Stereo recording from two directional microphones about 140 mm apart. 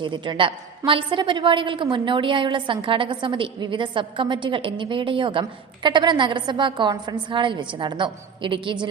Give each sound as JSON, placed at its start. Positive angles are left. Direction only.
{"t": 0.0, "sound": "a woman's voice", "side_deg": -35}